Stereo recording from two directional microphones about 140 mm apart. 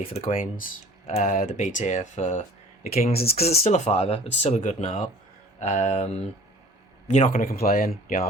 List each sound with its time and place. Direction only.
0.0 s speech: 45° left (ahead or behind)
2.9 s speech: 90° left
3.4 s speech: 50° left (ahead or behind)
7.1 s speech: 60° left (ahead or behind); by 8.3 s 90° left